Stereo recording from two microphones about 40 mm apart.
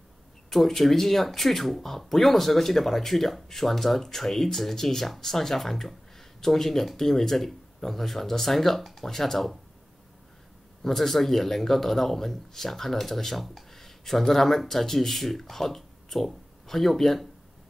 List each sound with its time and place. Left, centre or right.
0.5 s a man's voice: centre
10.8 s a man's voice: centre